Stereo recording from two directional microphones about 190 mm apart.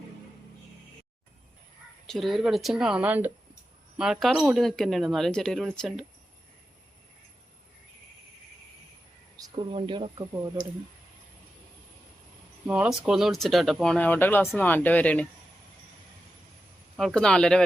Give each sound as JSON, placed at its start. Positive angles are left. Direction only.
{"t": 2.0, "sound": "speech", "side_deg": 0}
{"t": 9.4, "sound": "speech", "side_deg": -25}
{"t": 12.6, "sound": "speech", "side_deg": -5}
{"t": 17.0, "sound": "speech", "side_deg": 0}